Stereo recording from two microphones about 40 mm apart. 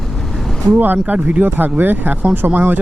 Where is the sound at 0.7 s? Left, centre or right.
Right.